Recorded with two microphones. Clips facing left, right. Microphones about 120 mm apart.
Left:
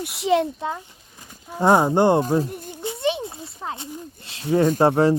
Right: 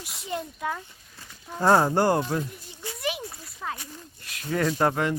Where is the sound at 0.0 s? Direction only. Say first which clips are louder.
Left 13 dB; 70° left (ahead or behind).